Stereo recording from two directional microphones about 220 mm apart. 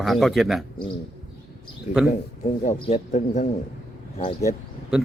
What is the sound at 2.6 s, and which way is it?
Speech, 35° left (ahead or behind).